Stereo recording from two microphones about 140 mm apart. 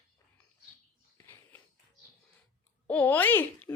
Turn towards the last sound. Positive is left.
turn(degrees=10)  # may be behind; listen again after turning